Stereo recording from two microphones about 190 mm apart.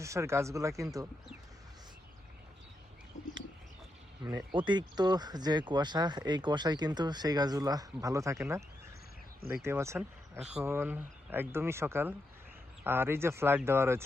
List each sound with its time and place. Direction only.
0.0 s speech: 15° right (ahead or behind)
4.5 s speech: 25° right (ahead or behind)
9.6 s speech: 15° right (ahead or behind)